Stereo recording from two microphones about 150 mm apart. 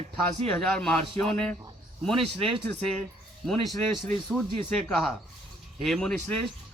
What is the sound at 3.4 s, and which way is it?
Speech, centre (ahead or behind).